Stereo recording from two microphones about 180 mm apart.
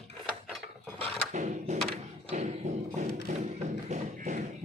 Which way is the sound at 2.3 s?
45° right (ahead or behind).